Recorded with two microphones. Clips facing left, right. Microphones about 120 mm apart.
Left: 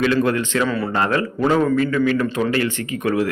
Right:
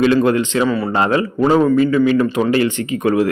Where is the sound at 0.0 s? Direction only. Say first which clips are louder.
Right 5 dB; 20° right (ahead or behind).